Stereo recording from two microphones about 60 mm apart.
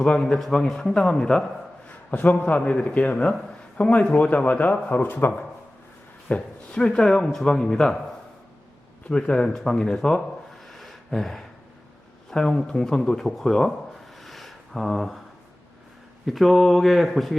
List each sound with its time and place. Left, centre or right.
0.2 s speech: centre
2.0 s a man's voice: left
6.2 s speech: centre
9.0 s speech: centre
10.7 s a sound: centre
12.3 s speech: centre
14.2 s a sound: centre
16.2 s speech: centre